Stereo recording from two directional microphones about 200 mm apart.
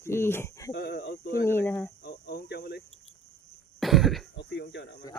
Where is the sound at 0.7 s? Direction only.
55° left (ahead or behind).